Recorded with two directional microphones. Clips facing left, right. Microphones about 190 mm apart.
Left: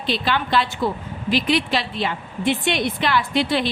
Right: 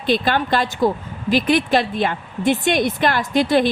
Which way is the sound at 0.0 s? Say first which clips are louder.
Right 4 dB; 50° right (ahead or behind).